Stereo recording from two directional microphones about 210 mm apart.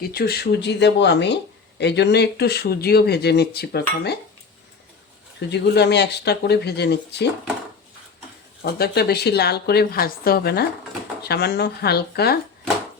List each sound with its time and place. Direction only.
0.0 s speech: 50° left (ahead or behind)
5.5 s speech: 55° left (ahead or behind)
8.6 s speech: 50° left (ahead or behind)